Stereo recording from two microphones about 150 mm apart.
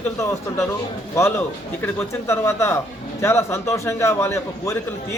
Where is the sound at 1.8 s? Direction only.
15° left (ahead or behind).